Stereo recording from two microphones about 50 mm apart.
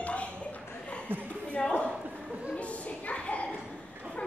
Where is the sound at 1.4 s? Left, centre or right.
Left.